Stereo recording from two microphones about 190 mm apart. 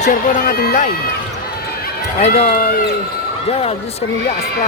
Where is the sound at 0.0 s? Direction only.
45° left (ahead or behind).